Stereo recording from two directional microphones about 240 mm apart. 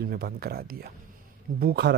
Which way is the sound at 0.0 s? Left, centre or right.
Right.